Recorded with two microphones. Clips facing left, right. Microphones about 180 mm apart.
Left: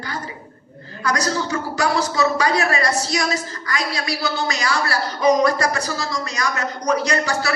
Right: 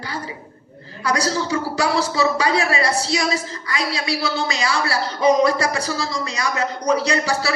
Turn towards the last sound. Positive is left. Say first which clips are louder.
# even
turn(degrees=-30)  # may be behind; listen again after turning